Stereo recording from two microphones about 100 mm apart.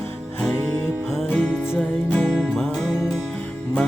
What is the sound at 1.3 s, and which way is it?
Music, 10° left (ahead or behind).